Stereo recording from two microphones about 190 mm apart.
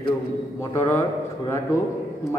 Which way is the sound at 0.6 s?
15° left (ahead or behind).